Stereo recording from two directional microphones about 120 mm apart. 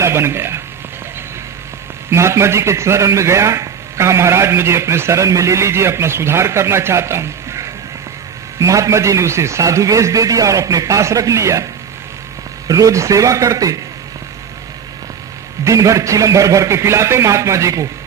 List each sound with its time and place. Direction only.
0.0 s a man's voice: 20° right (ahead or behind)
2.0 s a man's voice: 20° right (ahead or behind)
15.6 s a man's voice: 25° right (ahead or behind)